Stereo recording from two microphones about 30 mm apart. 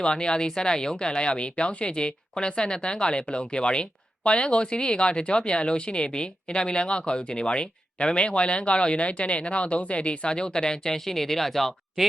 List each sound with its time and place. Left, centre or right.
0.0 s speech: left
10.9 s speech: centre